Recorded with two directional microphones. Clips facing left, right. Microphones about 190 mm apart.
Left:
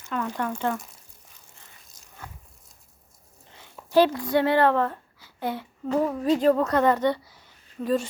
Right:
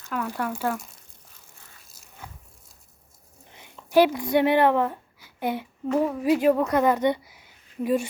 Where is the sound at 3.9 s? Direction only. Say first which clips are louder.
Right 1 dB; 15° right (ahead or behind).